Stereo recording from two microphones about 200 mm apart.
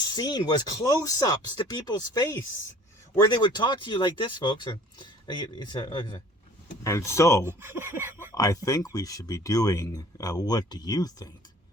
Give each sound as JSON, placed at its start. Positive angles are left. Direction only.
{"t": 0.1, "sound": "speech", "side_deg": 20}
{"t": 7.4, "sound": "speech", "side_deg": -10}
{"t": 8.4, "sound": "speech", "side_deg": 15}